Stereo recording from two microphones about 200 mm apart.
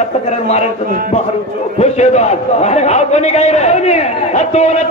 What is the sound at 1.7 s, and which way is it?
A man's voice, 35° left (ahead or behind).